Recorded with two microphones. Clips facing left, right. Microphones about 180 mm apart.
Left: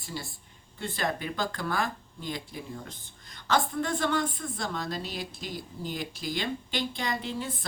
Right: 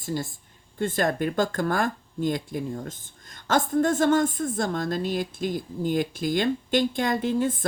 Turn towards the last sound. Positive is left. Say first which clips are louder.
# right 9 dB
turn(degrees=-50)  # may be behind; listen again after turning